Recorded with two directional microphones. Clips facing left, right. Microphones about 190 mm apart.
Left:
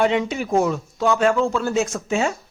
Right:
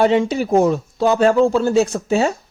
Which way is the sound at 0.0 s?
35° right (ahead or behind).